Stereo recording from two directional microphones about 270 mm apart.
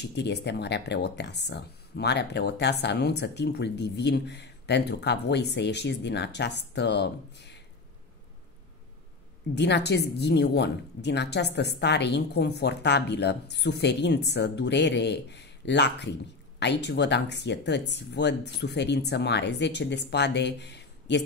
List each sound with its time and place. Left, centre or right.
0.0 s a woman's voice: left
9.6 s a woman's voice: left